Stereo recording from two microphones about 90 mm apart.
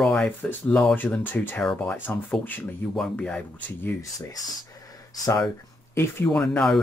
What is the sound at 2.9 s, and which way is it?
Speech, 10° left (ahead or behind).